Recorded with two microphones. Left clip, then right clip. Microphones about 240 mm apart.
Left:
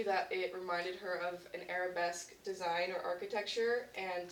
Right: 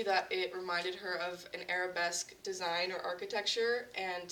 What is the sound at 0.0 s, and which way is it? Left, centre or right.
Speech, right.